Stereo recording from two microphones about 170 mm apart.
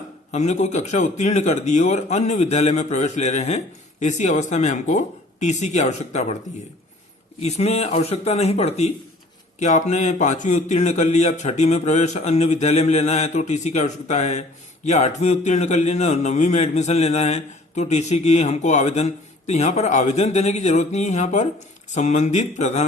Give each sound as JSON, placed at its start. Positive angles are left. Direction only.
{"t": 0.3, "sound": "a man's voice", "side_deg": 40}
{"t": 7.4, "sound": "a man's voice", "side_deg": 40}